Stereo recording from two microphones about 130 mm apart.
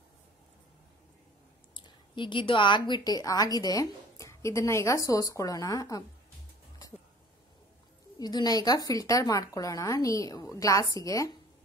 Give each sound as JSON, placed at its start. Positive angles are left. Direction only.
{"t": 1.7, "sound": "a woman's voice", "side_deg": 35}
{"t": 8.2, "sound": "a woman's voice", "side_deg": 30}